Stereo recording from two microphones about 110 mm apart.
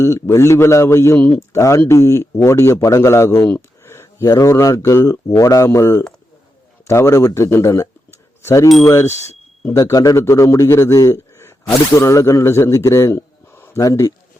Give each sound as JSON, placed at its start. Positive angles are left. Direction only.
{"t": 0.0, "sound": "a man's voice", "side_deg": 25}